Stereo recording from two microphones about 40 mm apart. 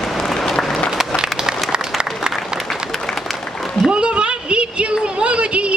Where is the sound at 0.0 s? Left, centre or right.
Centre.